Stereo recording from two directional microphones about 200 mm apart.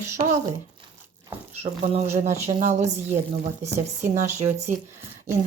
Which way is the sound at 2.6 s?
35° right (ahead or behind).